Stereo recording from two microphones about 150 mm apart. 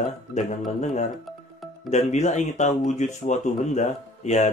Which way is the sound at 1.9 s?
50° left (ahead or behind).